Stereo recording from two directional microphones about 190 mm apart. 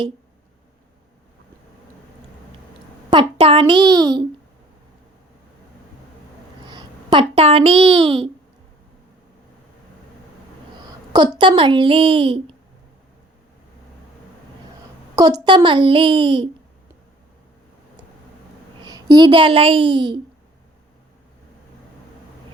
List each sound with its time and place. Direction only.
3.1 s a woman's voice: 25° right (ahead or behind)
6.7 s speech: 20° right (ahead or behind)
11.1 s a woman's voice: 20° right (ahead or behind)
15.1 s a woman's voice: 20° right (ahead or behind)
18.8 s a child's voice: 20° right (ahead or behind)